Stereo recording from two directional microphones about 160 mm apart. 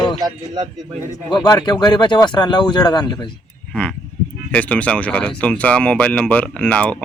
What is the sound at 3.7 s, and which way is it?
Speech, 5° left (ahead or behind).